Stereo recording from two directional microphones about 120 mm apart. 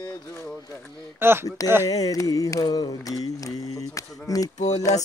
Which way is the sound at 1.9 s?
30° left (ahead or behind).